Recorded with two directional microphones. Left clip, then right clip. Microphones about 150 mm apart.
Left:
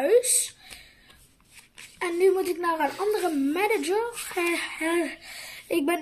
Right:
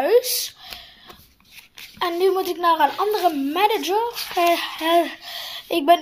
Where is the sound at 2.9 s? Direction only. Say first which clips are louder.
Right 6 dB; 35° right (ahead or behind).